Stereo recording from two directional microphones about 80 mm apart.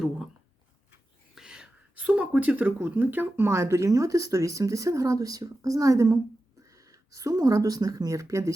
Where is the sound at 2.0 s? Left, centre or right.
Centre; by 6.1 s right.